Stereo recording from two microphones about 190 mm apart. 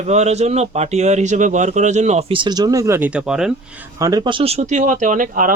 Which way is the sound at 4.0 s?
20° right (ahead or behind).